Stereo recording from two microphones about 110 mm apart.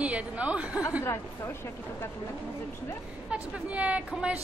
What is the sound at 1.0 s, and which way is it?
Speech, 25° left (ahead or behind).